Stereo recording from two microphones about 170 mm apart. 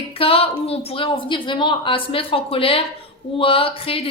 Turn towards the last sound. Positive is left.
turn(degrees=30)  # may be behind; listen again after turning